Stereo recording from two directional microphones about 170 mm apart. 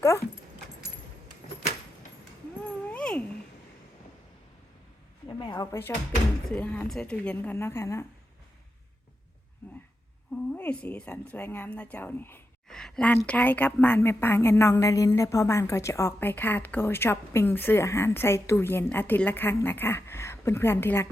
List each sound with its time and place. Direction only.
2.9 s cat: 5° left (ahead or behind)
5.3 s a woman's voice: 25° left (ahead or behind)
10.5 s a woman's voice: 10° left (ahead or behind)